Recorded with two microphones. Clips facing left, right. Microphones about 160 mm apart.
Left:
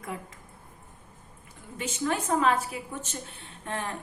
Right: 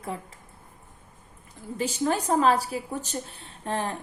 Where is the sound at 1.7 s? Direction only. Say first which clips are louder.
Right 4 dB; 35° right (ahead or behind).